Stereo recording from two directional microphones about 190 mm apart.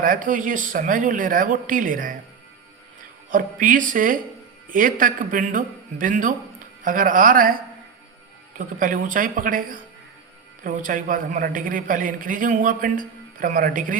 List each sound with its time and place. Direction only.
0.0 s a man's voice: 45° right (ahead or behind)
3.2 s a man's voice: 45° right (ahead or behind)